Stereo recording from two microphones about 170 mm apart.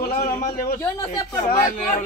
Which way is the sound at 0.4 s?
55° left (ahead or behind).